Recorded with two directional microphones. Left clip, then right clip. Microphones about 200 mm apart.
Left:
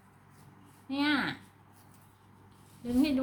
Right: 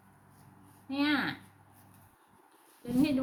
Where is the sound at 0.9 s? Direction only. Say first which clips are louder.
Left 1 dB; 5° left (ahead or behind).